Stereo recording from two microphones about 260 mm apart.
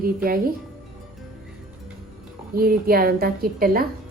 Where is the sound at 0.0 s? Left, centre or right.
Right.